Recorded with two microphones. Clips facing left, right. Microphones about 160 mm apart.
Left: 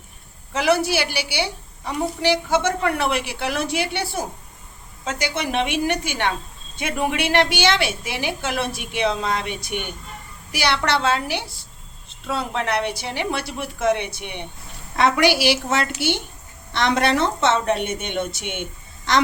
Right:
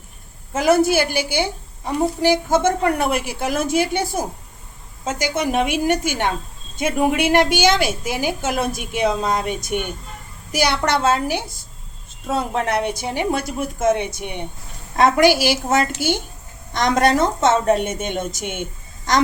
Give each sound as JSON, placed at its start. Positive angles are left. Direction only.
{"t": 0.5, "sound": "a woman's voice", "side_deg": -45}
{"t": 7.3, "sound": "a woman's voice", "side_deg": -45}
{"t": 12.0, "sound": "a sound", "side_deg": -45}
{"t": 12.5, "sound": "a woman's voice", "side_deg": -45}